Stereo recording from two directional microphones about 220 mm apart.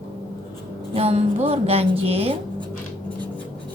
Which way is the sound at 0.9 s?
25° right (ahead or behind).